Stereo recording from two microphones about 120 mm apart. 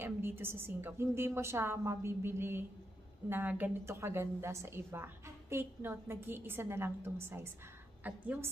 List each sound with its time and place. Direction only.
0.0 s a woman's voice: 20° right (ahead or behind)